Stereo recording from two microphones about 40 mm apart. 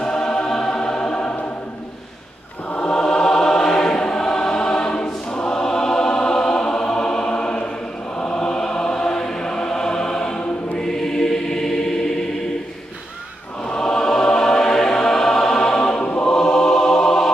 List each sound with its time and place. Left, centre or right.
0.0 s choir: centre
2.9 s choir: centre
8.2 s chant: left
10.8 s choir: centre
13.7 s choir: centre